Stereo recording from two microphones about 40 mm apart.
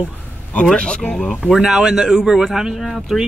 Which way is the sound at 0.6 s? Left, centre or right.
Left.